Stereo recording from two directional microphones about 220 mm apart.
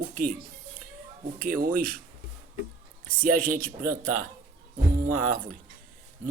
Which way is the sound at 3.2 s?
40° right (ahead or behind).